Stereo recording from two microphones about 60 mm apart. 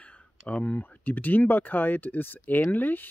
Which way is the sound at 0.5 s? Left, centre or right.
Left.